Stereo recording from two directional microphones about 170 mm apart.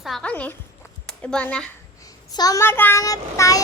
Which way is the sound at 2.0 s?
20° left (ahead or behind).